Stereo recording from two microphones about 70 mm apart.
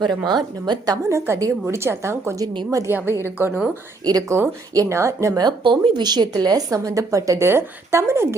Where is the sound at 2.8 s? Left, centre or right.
Right.